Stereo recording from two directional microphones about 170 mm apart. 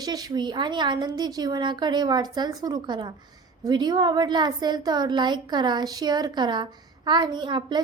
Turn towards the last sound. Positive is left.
turn(degrees=-25)  # may be behind; listen again after turning